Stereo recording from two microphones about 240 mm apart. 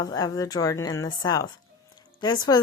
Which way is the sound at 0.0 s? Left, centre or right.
Centre.